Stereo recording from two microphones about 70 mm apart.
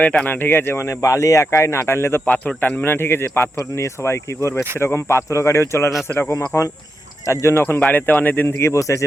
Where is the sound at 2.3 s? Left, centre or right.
Left.